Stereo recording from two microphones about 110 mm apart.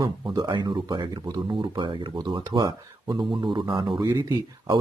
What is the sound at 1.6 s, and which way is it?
Speech, 50° right (ahead or behind).